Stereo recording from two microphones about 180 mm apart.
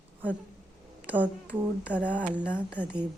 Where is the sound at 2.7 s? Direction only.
5° right (ahead or behind).